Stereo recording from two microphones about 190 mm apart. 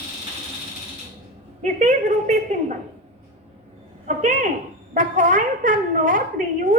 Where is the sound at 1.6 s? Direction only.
40° right (ahead or behind).